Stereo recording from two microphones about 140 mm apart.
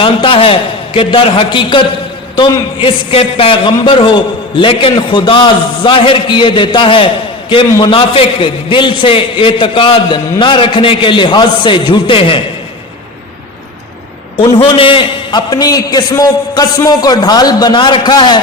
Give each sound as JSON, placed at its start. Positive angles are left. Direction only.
{"t": 0.0, "sound": "a man's voice", "side_deg": 40}
{"t": 14.3, "sound": "a man's voice", "side_deg": 40}